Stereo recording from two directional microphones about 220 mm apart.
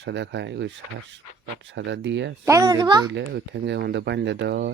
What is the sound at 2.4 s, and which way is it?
Speech, 15° right (ahead or behind).